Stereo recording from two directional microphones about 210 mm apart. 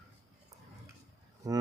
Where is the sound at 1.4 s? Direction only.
15° right (ahead or behind).